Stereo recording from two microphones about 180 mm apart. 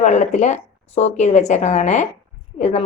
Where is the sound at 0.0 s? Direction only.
40° left (ahead or behind).